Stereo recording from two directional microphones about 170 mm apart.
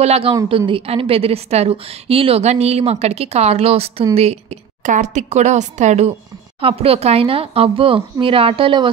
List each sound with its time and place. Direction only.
0.0 s a woman's voice: 35° right (ahead or behind)